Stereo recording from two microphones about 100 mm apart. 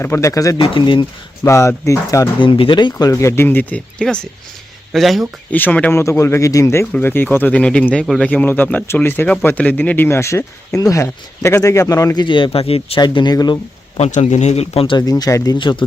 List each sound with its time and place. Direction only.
0.0 s speech: 30° left (ahead or behind)
0.6 s speech: 60° left (ahead or behind)
1.5 s speech: 30° left (ahead or behind)
2.4 s speech: 60° left (ahead or behind)
3.1 s speech: 30° left (ahead or behind)
4.9 s speech: centre (ahead or behind)
5.5 s speech: 15° left (ahead or behind)
5.9 s speech: 30° left (ahead or behind); by 8.3 s 5° left (ahead or behind)
8.3 s speech: 15° left (ahead or behind); by 12.2 s 35° left (ahead or behind)
12.2 s speech: 55° left (ahead or behind); by 13.0 s 75° left (ahead or behind)
13.0 s speech: 45° left (ahead or behind)
13.9 s a man's voice: 90° left
14.9 s speech: 40° left (ahead or behind)
15.5 s speech: 55° left (ahead or behind)